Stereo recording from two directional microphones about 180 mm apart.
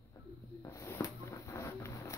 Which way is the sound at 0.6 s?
15° left (ahead or behind).